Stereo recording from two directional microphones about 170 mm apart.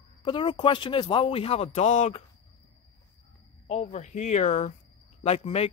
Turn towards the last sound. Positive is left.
turn(degrees=35)  # may be behind; listen again after turning